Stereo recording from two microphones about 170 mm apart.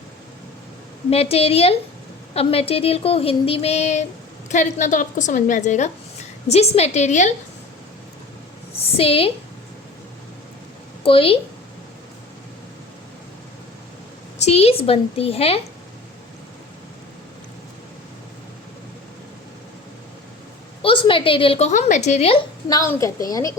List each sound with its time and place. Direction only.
1.1 s a woman's voice: 35° left (ahead or behind)
8.8 s speech: 35° left (ahead or behind)
11.0 s a woman's voice: 35° left (ahead or behind)
14.4 s speech: 35° left (ahead or behind)
20.8 s speech: 30° left (ahead or behind)
21.7 s a woman's voice: 45° left (ahead or behind)
22.7 s a woman's voice: 20° left (ahead or behind)